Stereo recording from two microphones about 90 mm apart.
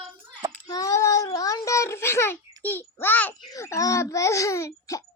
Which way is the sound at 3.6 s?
35° left (ahead or behind).